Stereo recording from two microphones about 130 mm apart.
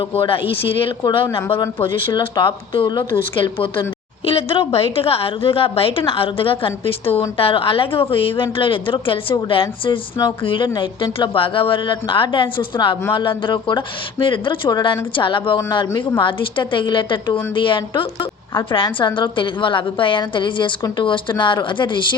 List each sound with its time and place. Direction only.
0.2 s a woman's voice: 45° left (ahead or behind)